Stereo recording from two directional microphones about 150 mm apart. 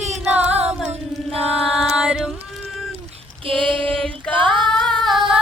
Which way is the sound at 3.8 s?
10° left (ahead or behind).